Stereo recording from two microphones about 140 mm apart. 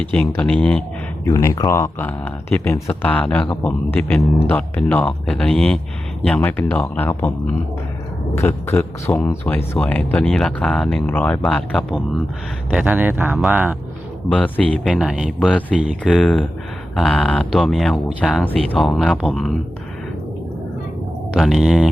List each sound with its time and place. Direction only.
0.1 s speech: 10° left (ahead or behind)
1.2 s speech: 20° left (ahead or behind)
8.4 s speech: 15° left (ahead or behind)
12.7 s speech: 10° right (ahead or behind)
14.3 s speech: 10° left (ahead or behind)
14.8 s speech: centre (ahead or behind)
15.4 s speech: 10° left (ahead or behind)
21.3 s speech: centre (ahead or behind)